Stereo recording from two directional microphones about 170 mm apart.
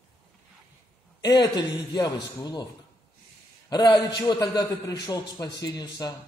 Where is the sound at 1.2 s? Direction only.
25° left (ahead or behind).